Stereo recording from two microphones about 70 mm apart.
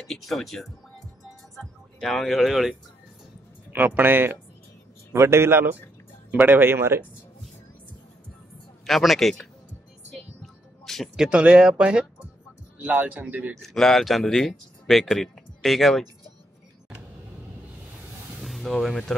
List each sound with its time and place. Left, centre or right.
0.0 s speech: centre
3.7 s a man's voice: right
8.8 s speech: centre
10.4 s music: centre
11.1 s speech: centre
12.8 s a man's voice: right
13.6 s speech: centre
18.4 s speech: centre